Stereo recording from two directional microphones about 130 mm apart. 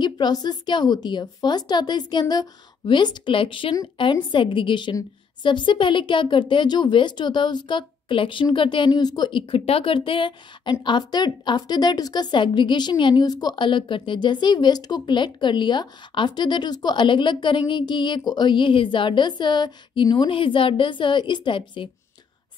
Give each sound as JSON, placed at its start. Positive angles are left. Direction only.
{"t": 0.0, "sound": "speech", "side_deg": 30}